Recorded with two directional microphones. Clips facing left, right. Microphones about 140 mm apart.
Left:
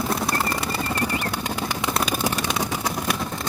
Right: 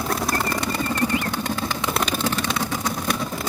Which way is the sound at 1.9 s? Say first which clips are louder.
Even; 10° left (ahead or behind).